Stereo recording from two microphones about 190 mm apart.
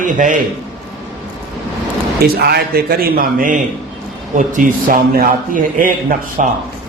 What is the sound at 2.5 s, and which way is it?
A man's voice, 55° right (ahead or behind).